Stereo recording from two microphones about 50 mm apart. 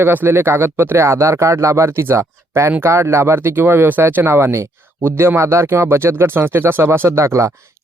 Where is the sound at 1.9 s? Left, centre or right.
Right.